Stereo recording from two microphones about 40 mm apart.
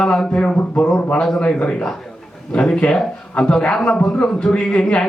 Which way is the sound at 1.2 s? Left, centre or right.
Centre.